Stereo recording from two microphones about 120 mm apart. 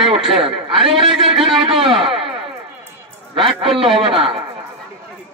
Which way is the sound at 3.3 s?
50° right (ahead or behind).